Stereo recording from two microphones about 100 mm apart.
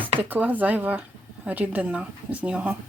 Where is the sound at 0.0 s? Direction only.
15° right (ahead or behind).